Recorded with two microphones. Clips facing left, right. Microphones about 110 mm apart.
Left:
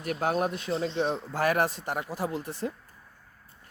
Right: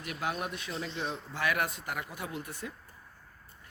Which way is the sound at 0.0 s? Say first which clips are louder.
Left 8 dB; 40° left (ahead or behind).